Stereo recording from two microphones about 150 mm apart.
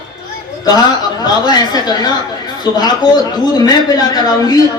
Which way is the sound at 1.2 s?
25° left (ahead or behind).